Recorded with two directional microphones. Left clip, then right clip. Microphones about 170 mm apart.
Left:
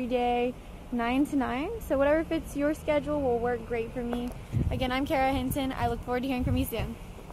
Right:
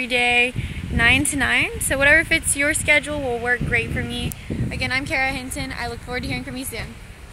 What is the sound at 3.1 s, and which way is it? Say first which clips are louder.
Speech: right 5 dB; 35° right (ahead or behind).